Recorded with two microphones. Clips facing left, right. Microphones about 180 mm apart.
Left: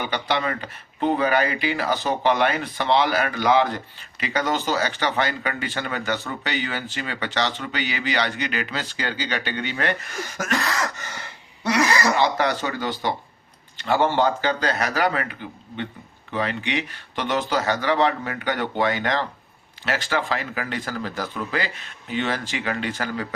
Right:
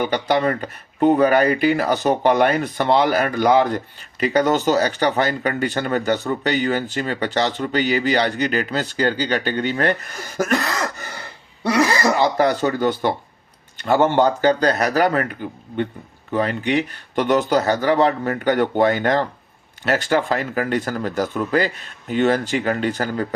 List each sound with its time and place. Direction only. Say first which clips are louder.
0.0 s speech: right 6 dB; 45° right (ahead or behind)